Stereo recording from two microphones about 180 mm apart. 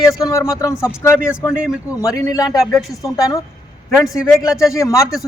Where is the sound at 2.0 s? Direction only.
20° left (ahead or behind).